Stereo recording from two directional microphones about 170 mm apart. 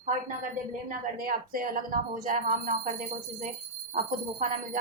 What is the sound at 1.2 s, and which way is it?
Speech, 55° right (ahead or behind).